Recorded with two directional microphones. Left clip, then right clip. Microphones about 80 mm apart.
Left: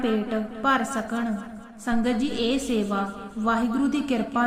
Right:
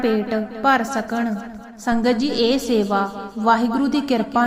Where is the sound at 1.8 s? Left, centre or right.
Right.